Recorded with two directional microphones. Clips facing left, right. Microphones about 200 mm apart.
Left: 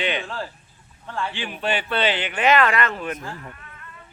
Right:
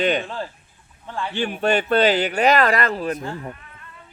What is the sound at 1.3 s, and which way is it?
Speech, 45° right (ahead or behind).